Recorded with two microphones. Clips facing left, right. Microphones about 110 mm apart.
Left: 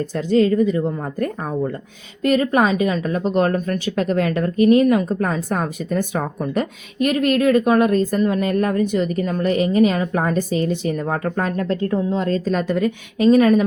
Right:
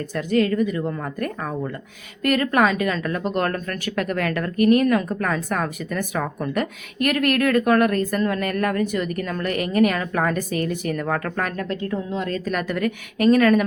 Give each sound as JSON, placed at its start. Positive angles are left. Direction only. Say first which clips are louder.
{"t": 0.0, "sound": "speech", "louder": "left 4 dB", "side_deg": 30}